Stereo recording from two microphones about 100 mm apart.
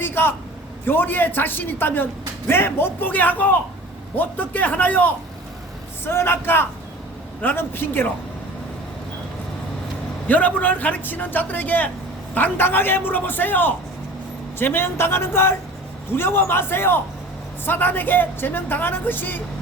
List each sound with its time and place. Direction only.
0.0 s a man's voice: 20° left (ahead or behind)
10.2 s a man's voice: 15° left (ahead or behind)